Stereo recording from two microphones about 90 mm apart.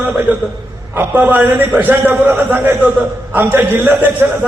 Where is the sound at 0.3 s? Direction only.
20° right (ahead or behind).